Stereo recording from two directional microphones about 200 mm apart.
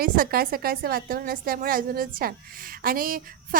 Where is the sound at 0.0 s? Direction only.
45° right (ahead or behind).